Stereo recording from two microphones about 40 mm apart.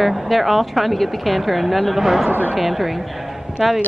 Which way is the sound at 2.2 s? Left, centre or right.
Right.